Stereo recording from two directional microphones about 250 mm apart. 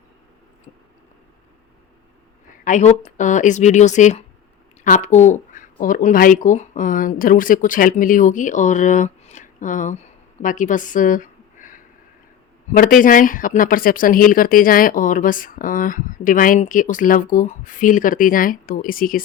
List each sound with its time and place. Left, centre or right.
2.6 s speech: left
13.0 s speech: left